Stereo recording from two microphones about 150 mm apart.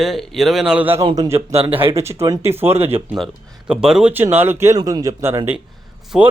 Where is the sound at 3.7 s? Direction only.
5° right (ahead or behind).